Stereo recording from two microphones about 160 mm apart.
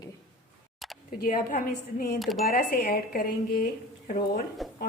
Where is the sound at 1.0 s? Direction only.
55° left (ahead or behind).